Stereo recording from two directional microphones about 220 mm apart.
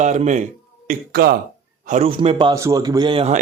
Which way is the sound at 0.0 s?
35° right (ahead or behind).